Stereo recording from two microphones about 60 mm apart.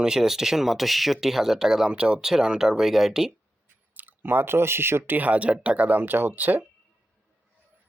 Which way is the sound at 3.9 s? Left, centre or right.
Right.